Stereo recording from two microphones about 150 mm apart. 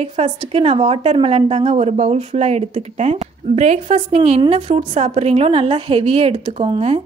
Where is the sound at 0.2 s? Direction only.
40° right (ahead or behind).